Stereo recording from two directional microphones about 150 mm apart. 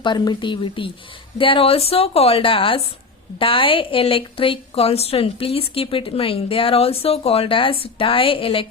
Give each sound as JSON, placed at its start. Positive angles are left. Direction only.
{"t": 0.0, "sound": "a woman's voice", "side_deg": 30}